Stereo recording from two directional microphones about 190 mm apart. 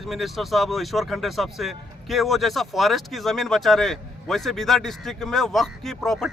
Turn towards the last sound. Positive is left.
turn(degrees=0)  # may be behind; listen again after turning